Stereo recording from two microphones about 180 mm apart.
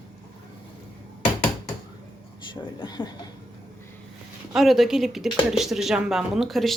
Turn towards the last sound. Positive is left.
turn(degrees=0)  # may be behind; listen again after turning